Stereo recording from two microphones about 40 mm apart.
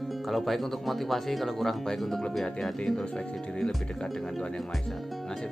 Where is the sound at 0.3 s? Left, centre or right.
Centre.